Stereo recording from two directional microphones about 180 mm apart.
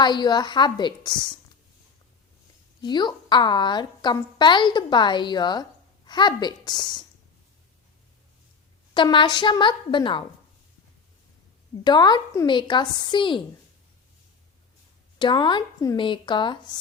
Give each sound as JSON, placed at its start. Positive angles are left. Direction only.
{"t": 0.0, "sound": "a woman's voice", "side_deg": 25}
{"t": 2.8, "sound": "a woman's voice", "side_deg": 25}
{"t": 9.0, "sound": "a woman's voice", "side_deg": 25}
{"t": 11.8, "sound": "a woman's voice", "side_deg": 25}
{"t": 15.2, "sound": "a woman's voice", "side_deg": 25}